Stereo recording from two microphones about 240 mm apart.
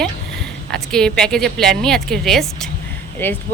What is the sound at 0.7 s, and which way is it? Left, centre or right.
Speech, centre.